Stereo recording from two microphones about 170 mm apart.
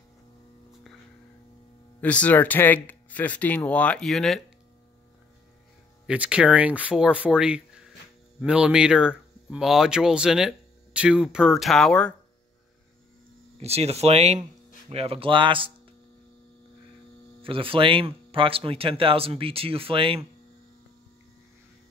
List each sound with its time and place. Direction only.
2.0 s speech: 10° left (ahead or behind)
6.0 s speech: 5° right (ahead or behind)
13.6 s speech: 35° right (ahead or behind)
17.4 s speech: 30° right (ahead or behind)